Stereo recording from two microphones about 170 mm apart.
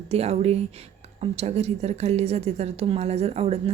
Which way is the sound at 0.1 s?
40° right (ahead or behind).